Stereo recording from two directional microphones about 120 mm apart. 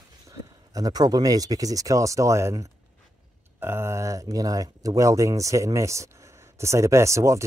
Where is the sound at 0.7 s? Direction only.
30° right (ahead or behind).